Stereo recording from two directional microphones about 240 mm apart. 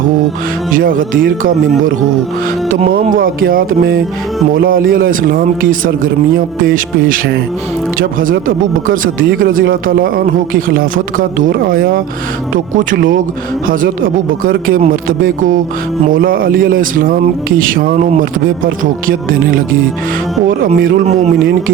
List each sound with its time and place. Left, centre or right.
0.7 s speech: right
2.6 s speech: right